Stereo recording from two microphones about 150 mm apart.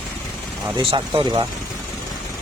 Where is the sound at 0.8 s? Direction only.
35° right (ahead or behind).